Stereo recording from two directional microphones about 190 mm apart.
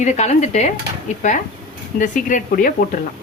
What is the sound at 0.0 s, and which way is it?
Speech, 40° left (ahead or behind).